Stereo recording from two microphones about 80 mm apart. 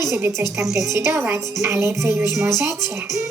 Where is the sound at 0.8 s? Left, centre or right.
Right.